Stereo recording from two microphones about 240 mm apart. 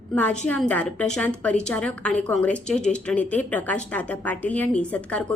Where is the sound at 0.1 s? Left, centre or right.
Centre.